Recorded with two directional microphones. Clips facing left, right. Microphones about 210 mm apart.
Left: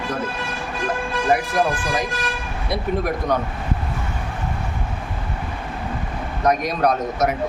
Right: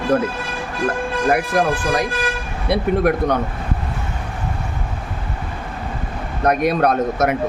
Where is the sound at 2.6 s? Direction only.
65° right (ahead or behind).